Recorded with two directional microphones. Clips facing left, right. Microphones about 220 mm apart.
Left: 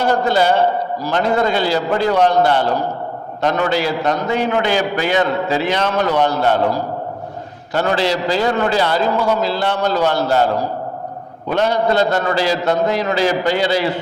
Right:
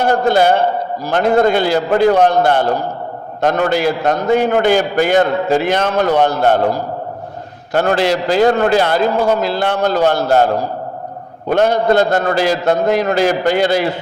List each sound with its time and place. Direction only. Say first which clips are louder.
0.0 s a man's voice: right 3 dB; 50° right (ahead or behind)